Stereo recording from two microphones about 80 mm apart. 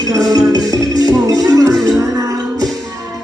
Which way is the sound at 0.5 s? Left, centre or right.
Right.